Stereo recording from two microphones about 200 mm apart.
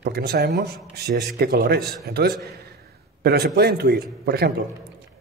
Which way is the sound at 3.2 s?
50° right (ahead or behind).